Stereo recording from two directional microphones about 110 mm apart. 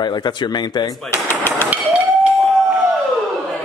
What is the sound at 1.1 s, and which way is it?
Machine gun, 20° left (ahead or behind).